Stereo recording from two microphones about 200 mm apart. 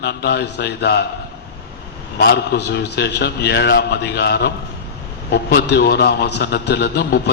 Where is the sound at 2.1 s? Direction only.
55° left (ahead or behind).